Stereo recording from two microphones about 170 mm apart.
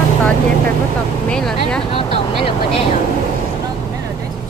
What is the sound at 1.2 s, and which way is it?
Vehicle, 5° left (ahead or behind).